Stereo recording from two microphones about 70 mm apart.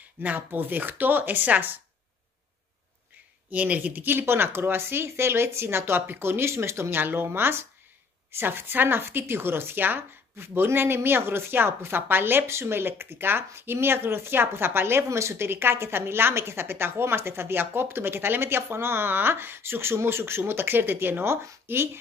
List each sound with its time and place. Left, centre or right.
0.2 s speech: right
3.4 s speech: right